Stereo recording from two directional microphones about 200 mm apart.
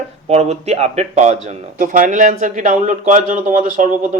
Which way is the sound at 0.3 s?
30° right (ahead or behind).